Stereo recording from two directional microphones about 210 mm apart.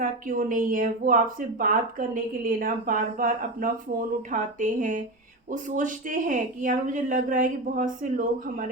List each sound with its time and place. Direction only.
0.0 s a woman's voice: 40° right (ahead or behind)